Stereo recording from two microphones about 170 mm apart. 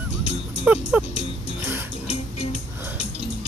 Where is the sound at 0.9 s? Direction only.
10° right (ahead or behind).